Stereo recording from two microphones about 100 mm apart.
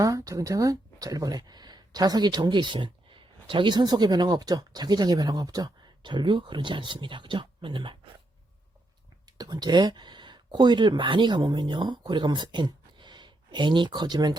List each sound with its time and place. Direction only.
0.0 s speech: 35° right (ahead or behind); by 7.9 s 55° right (ahead or behind)
9.4 s speech: 40° right (ahead or behind)